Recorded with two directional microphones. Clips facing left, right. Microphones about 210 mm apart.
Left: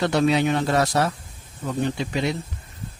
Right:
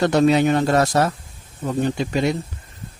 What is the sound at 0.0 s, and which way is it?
Speech, 45° right (ahead or behind).